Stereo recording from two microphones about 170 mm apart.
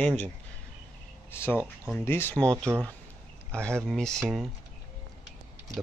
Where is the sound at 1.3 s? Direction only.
15° left (ahead or behind).